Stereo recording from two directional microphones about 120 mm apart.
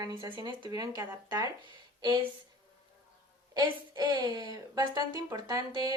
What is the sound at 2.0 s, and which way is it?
Speech, 40° right (ahead or behind).